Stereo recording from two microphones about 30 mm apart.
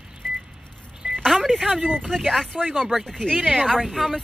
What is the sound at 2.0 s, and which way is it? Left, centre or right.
Speech, centre.